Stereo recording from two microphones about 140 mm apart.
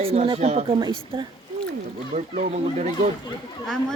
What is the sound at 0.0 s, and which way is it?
Speech, 45° right (ahead or behind).